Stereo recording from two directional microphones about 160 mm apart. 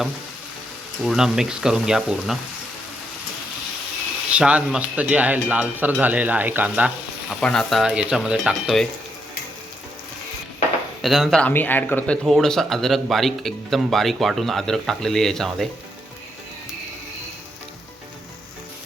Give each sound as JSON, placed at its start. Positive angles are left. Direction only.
{"t": 1.0, "sound": "speech", "side_deg": -5}
{"t": 4.3, "sound": "a sound", "side_deg": -5}
{"t": 7.3, "sound": "speech", "side_deg": 5}
{"t": 11.0, "sound": "speech", "side_deg": 0}